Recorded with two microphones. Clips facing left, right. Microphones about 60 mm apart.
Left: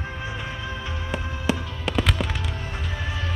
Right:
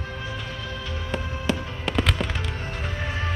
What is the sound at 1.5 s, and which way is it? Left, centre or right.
Fireworks, centre.